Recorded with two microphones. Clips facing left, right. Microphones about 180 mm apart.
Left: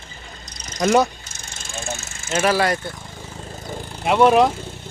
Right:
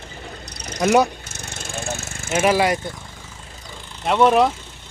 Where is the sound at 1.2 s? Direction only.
65° right (ahead or behind).